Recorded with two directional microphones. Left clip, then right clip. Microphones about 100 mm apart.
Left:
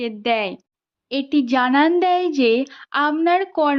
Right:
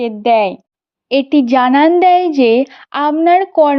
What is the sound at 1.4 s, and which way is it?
A woman's voice, 55° right (ahead or behind).